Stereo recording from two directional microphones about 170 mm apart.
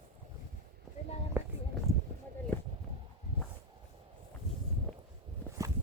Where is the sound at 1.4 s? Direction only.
10° right (ahead or behind).